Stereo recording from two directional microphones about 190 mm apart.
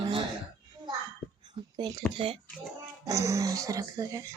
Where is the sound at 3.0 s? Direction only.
15° right (ahead or behind).